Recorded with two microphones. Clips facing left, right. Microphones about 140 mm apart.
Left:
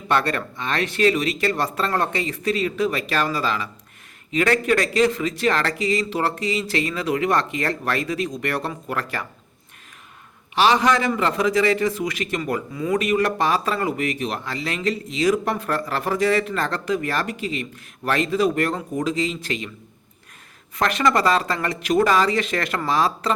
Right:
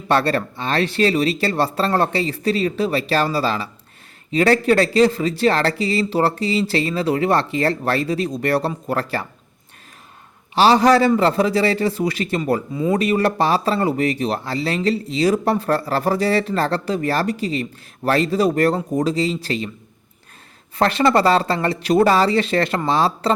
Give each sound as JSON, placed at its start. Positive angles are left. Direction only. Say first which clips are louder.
{"t": 0.1, "sound": "a man's voice", "louder": "right 4 dB", "side_deg": -30}
{"t": 10.5, "sound": "a man's voice", "louder": "right 5 dB", "side_deg": -35}
{"t": 20.7, "sound": "a man's voice", "louder": "right 4 dB", "side_deg": -30}